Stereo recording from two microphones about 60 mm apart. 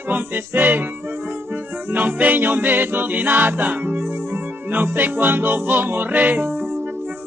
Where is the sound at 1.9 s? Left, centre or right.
Right.